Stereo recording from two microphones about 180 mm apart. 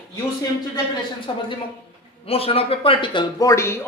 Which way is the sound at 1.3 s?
25° left (ahead or behind).